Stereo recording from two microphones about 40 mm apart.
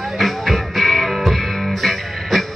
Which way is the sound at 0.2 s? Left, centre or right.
Centre.